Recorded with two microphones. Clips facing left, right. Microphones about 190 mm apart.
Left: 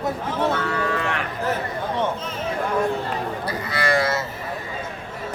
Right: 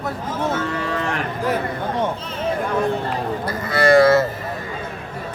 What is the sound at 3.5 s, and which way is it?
Speech, 50° right (ahead or behind).